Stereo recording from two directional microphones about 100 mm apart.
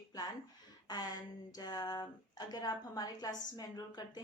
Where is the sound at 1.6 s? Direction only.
40° left (ahead or behind).